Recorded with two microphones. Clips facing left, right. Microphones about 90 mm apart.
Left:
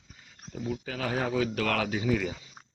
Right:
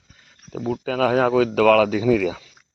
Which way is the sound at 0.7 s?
90° right.